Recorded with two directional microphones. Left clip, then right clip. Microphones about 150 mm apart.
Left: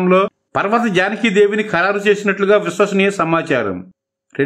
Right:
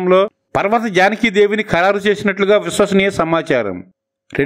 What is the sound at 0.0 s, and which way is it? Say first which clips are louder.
A man's voice: right 1 dB; 35° right (ahead or behind).